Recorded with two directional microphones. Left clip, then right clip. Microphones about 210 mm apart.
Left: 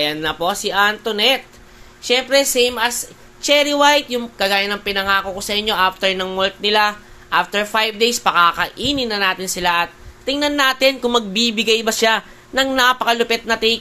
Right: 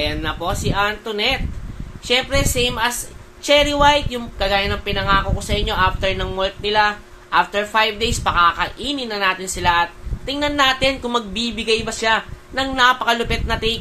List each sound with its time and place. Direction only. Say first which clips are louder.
0.0 s speech: left 3 dB; 30° left (ahead or behind)